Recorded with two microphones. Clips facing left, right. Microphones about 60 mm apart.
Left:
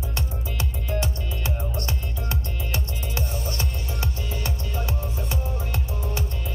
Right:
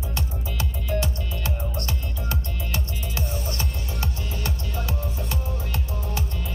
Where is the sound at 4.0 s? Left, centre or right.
Left.